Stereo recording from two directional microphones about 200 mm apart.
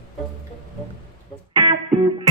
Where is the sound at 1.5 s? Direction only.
20° right (ahead or behind).